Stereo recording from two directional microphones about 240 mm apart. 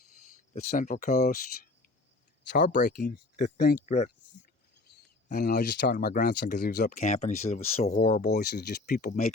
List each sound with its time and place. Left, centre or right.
0.5 s speech: left
2.5 s speech: left
5.3 s speech: left
6.9 s speech: left
8.3 s speech: left